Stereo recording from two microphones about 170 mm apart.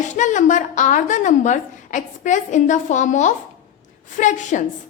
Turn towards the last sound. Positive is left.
turn(degrees=45)  # may be behind; listen again after turning